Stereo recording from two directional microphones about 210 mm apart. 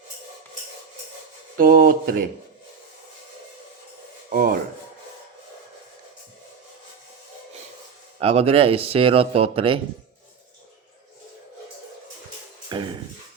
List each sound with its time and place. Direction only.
1.5 s speech: 45° right (ahead or behind)
4.3 s rub: 45° right (ahead or behind)
8.2 s speech: 30° right (ahead or behind)
12.6 s music: 20° right (ahead or behind)